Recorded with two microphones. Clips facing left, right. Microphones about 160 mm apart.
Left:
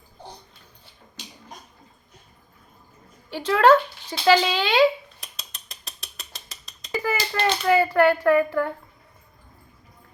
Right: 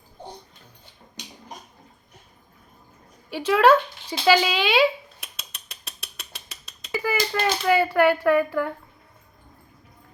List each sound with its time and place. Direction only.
3.2 s speech: 10° right (ahead or behind)
4.3 s mechanisms: 5° right (ahead or behind)